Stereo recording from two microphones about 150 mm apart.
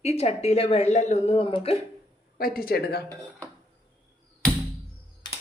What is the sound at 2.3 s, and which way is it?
Speech, 80° left.